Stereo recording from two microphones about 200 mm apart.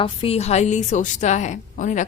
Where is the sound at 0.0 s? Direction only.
30° left (ahead or behind).